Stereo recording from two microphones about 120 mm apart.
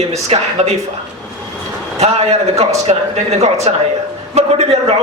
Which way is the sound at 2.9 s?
65° right (ahead or behind).